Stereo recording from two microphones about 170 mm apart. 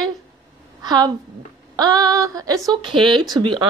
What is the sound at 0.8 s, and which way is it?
Speech, 25° right (ahead or behind).